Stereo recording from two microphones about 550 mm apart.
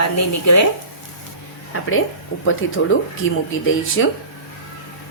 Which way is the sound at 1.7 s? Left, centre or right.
Left.